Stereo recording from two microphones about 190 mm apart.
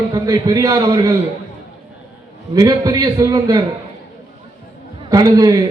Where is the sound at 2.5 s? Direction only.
20° right (ahead or behind).